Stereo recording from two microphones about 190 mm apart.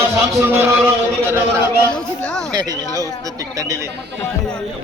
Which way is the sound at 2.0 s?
5° left (ahead or behind).